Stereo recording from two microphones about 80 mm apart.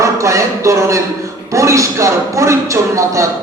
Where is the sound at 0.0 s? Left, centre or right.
Right.